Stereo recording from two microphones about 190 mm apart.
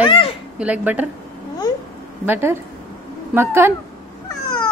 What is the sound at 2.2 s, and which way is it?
A woman's voice, 10° right (ahead or behind).